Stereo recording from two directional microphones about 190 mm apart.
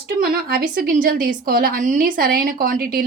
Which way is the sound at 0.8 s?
45° right (ahead or behind).